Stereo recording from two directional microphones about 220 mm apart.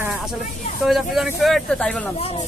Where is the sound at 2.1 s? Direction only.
25° left (ahead or behind).